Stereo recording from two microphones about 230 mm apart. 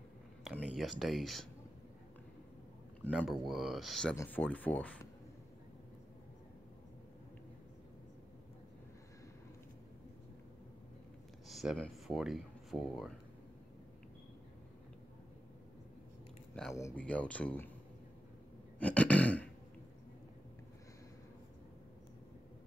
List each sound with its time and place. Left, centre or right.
0.4 s speech: centre
3.1 s speech: centre
11.4 s speech: centre
16.7 s speech: centre
18.8 s throat clearing: centre